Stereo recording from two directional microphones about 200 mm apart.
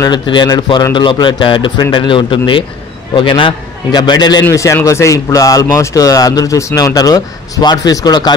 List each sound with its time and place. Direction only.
0.0 s a man's voice: 20° left (ahead or behind)